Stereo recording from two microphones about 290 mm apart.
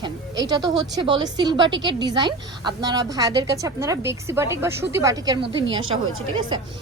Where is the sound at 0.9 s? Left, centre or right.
Centre.